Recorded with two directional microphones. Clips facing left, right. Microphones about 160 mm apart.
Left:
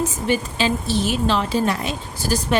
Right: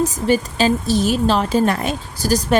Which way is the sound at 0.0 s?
40° right (ahead or behind).